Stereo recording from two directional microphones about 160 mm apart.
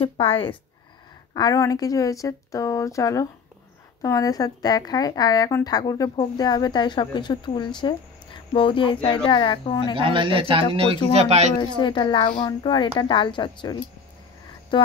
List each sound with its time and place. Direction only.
0.0 s speech: 35° left (ahead or behind)
1.3 s speech: 20° left (ahead or behind)
9.9 s a man's voice: 30° right (ahead or behind)
11.5 s speech: 30° left (ahead or behind)